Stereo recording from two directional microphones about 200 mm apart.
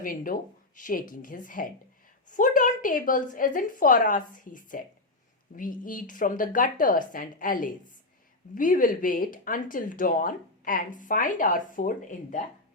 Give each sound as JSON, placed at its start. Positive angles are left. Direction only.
{"t": 0.0, "sound": "speech", "side_deg": 45}